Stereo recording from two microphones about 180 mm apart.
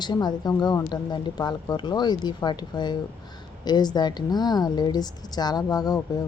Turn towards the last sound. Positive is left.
turn(degrees=20)  # may be behind; listen again after turning